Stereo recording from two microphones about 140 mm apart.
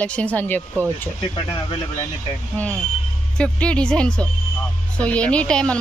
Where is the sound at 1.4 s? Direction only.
35° left (ahead or behind).